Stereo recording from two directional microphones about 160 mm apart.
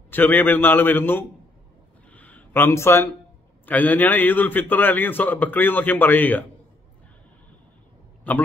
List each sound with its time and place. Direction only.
0.1 s a man's voice: 10° left (ahead or behind)
2.1 s a sound: 10° left (ahead or behind)
3.6 s a man's voice: 10° left (ahead or behind)
8.3 s a man's voice: 10° left (ahead or behind)